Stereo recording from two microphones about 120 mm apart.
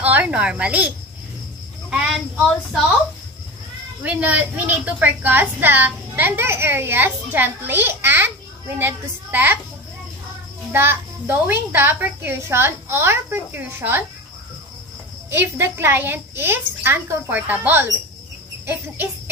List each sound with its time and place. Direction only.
0.0 s a woman's voice: 10° right (ahead or behind)
4.0 s a woman's voice: 15° right (ahead or behind)
10.7 s a child's voice: 20° right (ahead or behind)
15.2 s a child's voice: 20° right (ahead or behind)